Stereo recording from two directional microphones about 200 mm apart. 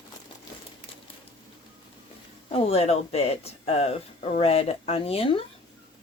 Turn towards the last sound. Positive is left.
turn(degrees=30)  # may be behind; listen again after turning